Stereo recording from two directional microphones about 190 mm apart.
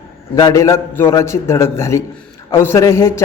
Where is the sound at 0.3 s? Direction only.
20° left (ahead or behind).